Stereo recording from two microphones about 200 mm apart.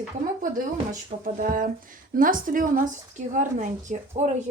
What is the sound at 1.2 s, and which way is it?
Speech, 45° right (ahead or behind).